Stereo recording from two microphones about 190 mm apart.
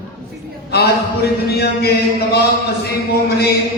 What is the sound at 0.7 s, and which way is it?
Speech, 55° left (ahead or behind).